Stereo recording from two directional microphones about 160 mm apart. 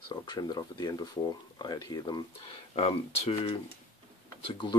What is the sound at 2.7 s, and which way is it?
Speech, 40° left (ahead or behind).